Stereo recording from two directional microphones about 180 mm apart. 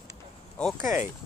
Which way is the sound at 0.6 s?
5° left (ahead or behind).